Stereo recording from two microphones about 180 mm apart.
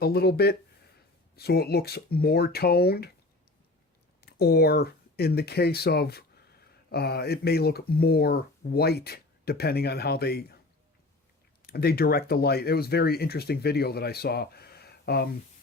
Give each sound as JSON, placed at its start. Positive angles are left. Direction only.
{"t": 0.0, "sound": "speech", "side_deg": 60}
{"t": 4.2, "sound": "speech", "side_deg": 60}
{"t": 11.6, "sound": "speech", "side_deg": 60}